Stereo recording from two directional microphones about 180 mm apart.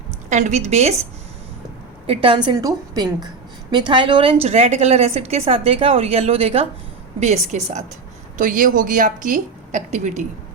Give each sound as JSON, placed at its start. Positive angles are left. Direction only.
{"t": 0.3, "sound": "a woman's voice", "side_deg": -40}
{"t": 2.0, "sound": "a woman's voice", "side_deg": -30}